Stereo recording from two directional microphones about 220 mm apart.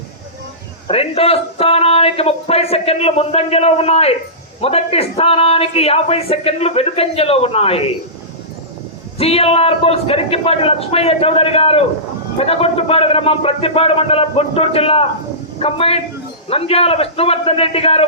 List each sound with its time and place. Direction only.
0.9 s a man's voice: 25° left (ahead or behind)
9.1 s a man's voice: 25° left (ahead or behind)